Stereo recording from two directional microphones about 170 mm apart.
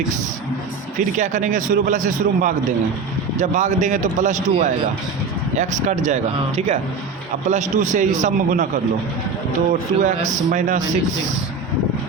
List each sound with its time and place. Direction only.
0.9 s a man's voice: 45° right (ahead or behind)
10.0 s a man's voice: 45° right (ahead or behind)